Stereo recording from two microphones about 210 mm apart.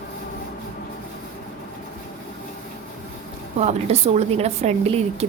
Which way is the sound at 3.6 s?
30° right (ahead or behind).